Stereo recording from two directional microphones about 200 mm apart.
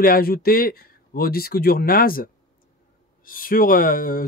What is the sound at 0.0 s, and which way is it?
Speech, 45° left (ahead or behind).